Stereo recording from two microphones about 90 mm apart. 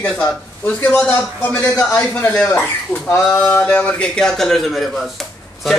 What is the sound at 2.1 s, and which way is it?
A man's voice, 20° left (ahead or behind).